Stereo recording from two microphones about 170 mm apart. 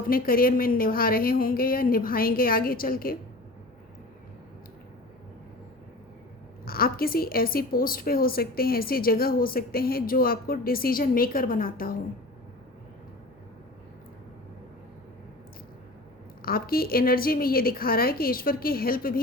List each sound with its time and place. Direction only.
0.1 s a woman's voice: 60° left (ahead or behind)
6.7 s a woman's voice: 60° left (ahead or behind)
16.4 s a woman's voice: 60° left (ahead or behind)